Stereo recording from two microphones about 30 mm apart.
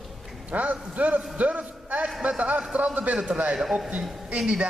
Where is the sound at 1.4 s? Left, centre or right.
Right.